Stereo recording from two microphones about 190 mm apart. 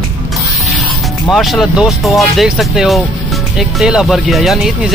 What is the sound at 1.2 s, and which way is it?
Speech, centre (ahead or behind).